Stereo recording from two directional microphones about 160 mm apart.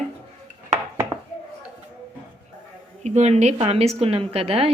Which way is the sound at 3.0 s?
45° right (ahead or behind).